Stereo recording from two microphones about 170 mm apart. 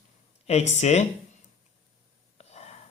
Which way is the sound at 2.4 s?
40° left (ahead or behind).